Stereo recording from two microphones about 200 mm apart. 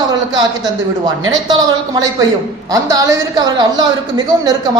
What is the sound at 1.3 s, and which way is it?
A woman's voice, 20° right (ahead or behind).